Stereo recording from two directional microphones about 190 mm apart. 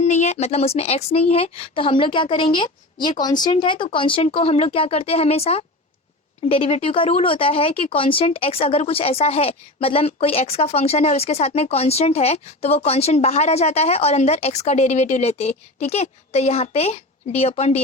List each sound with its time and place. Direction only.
0.0 s speech: 35° left (ahead or behind)